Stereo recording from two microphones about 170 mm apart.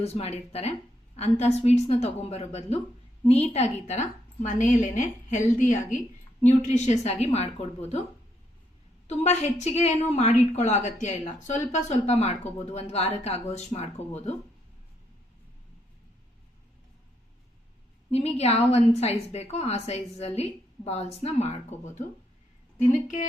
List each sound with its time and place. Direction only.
0.0 s a woman's voice: 40° left (ahead or behind)
9.0 s speech: 40° left (ahead or behind)
18.1 s a woman's voice: 40° left (ahead or behind)